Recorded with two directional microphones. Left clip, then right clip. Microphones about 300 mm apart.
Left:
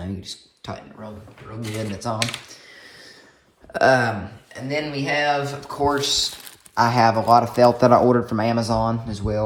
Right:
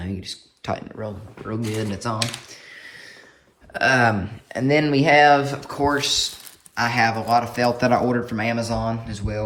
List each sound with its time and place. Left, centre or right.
0.0 s a sound: centre
1.8 s speech: centre
3.8 s speech: centre
4.5 s speech: centre